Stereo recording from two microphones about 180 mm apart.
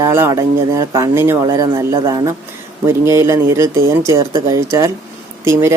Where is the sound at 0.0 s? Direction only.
15° right (ahead or behind).